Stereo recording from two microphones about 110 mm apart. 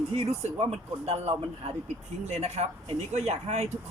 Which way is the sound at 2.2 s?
85° right.